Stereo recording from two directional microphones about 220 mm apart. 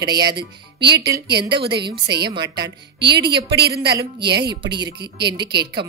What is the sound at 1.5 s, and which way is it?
Speech, 50° right (ahead or behind).